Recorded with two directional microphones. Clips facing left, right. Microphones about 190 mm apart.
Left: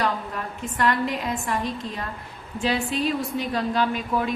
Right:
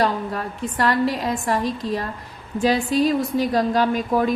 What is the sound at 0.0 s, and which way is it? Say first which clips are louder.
A woman's voice: right 5 dB; 35° right (ahead or behind).